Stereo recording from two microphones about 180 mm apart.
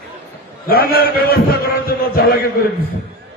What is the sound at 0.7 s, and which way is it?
A man's voice, 60° left (ahead or behind).